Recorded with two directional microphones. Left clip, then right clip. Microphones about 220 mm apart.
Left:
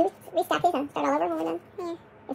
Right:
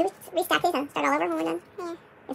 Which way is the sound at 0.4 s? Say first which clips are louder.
Even; 45° right (ahead or behind).